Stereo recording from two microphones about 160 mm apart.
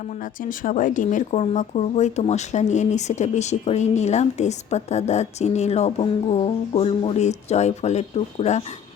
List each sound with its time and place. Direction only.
0.4 s speech: 55° left (ahead or behind)